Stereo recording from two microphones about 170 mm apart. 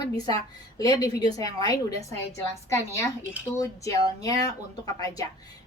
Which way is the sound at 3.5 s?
20° left (ahead or behind).